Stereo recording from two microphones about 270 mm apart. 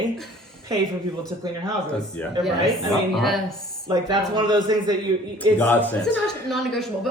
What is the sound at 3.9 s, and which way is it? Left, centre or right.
Speech, centre.